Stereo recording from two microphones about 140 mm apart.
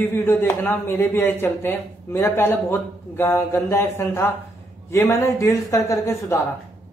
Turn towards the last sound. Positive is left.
turn(degrees=20)  # may be behind; listen again after turning